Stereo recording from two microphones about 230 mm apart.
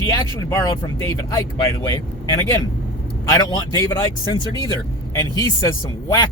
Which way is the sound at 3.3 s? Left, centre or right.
Centre.